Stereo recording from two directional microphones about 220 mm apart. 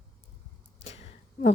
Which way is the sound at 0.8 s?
30° left (ahead or behind).